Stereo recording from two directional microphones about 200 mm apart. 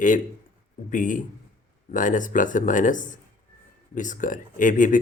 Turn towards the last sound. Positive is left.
turn(degrees=40)  # may be behind; listen again after turning